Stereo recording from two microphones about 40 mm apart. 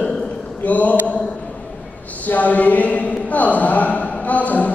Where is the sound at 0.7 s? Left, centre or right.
Left.